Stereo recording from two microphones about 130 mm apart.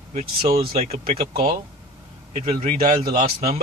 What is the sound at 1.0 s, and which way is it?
A man's voice, 90° right.